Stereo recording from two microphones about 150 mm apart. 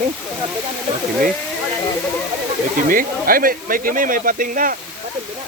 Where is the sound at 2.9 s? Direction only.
70° right (ahead or behind).